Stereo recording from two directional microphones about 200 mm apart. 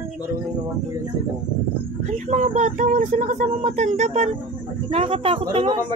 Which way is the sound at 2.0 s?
35° right (ahead or behind).